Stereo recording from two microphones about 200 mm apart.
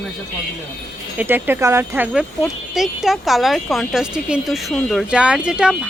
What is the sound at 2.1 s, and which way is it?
Speech, centre (ahead or behind).